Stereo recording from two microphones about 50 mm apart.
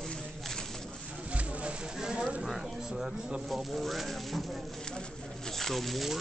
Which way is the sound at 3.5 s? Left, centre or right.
Centre.